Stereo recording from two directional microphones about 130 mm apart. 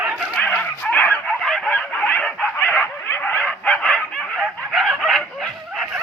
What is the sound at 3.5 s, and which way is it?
Chicken, 5° left (ahead or behind).